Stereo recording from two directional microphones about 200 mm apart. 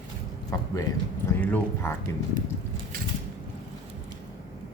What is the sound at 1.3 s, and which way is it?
Speech, 10° left (ahead or behind).